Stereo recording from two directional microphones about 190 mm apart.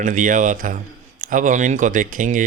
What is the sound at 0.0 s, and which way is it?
Speech, 45° right (ahead or behind).